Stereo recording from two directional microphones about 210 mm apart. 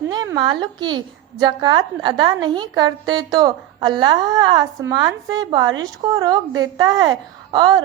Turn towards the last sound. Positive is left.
turn(degrees=-20)  # may be behind; listen again after turning